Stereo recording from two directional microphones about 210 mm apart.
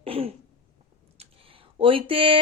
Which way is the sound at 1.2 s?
25° right (ahead or behind).